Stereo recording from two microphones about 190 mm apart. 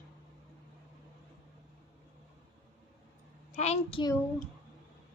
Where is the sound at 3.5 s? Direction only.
35° left (ahead or behind).